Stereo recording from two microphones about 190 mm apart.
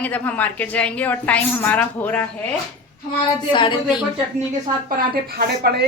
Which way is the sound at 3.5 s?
25° left (ahead or behind).